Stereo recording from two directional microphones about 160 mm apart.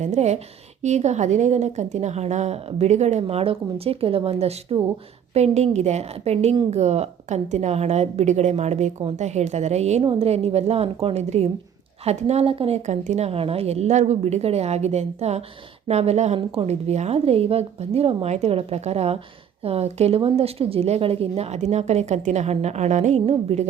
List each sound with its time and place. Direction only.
0.0 s a woman's voice: 45° right (ahead or behind)